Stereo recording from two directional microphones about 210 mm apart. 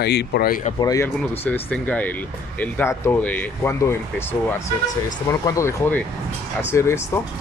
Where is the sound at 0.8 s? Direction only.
15° left (ahead or behind).